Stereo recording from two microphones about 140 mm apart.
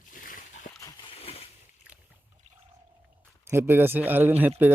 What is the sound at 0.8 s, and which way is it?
Splash, 35° left (ahead or behind).